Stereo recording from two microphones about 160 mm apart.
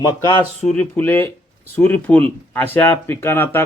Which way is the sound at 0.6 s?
5° left (ahead or behind).